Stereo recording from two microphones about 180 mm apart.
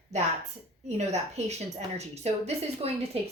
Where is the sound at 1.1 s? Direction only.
40° right (ahead or behind).